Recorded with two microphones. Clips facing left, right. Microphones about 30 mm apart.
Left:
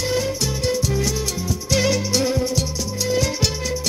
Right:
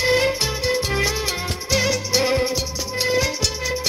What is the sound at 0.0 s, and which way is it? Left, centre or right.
Music, right.